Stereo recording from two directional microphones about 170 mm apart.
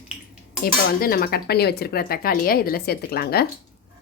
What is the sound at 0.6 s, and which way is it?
Speech, 60° left (ahead or behind).